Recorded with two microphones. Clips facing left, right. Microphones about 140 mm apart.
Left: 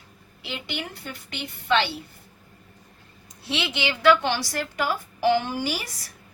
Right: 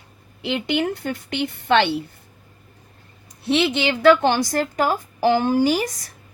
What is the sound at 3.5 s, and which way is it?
A woman's voice, 50° right (ahead or behind).